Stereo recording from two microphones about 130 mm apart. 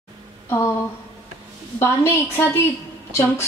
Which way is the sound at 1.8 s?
20° left (ahead or behind).